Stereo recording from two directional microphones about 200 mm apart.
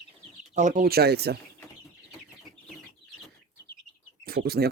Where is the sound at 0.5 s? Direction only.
40° right (ahead or behind); by 1.4 s 55° right (ahead or behind).